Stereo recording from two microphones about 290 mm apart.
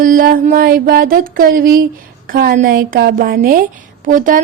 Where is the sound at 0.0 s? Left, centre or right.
Right.